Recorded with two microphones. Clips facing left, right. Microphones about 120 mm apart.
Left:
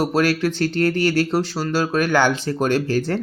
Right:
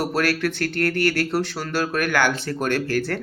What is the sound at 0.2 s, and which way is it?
Speech, 15° left (ahead or behind).